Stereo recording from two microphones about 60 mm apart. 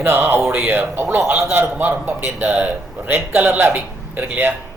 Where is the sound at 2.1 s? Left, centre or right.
Right.